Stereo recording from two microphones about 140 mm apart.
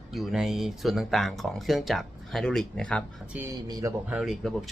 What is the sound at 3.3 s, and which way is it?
Speech, 20° right (ahead or behind).